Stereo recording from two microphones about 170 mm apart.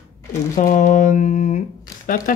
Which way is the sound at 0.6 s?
50° left (ahead or behind).